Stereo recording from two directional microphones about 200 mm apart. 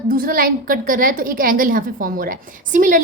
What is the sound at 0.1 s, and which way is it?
A woman's voice, 45° right (ahead or behind).